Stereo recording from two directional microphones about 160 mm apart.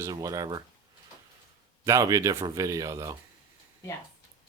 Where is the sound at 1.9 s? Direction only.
20° right (ahead or behind).